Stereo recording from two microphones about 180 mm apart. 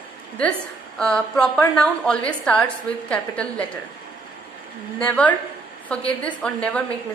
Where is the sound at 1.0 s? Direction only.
5° left (ahead or behind).